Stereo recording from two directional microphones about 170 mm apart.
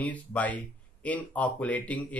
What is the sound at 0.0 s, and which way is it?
Speech, 10° left (ahead or behind).